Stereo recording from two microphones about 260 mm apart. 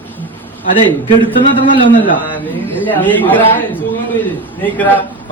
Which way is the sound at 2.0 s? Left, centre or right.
Centre.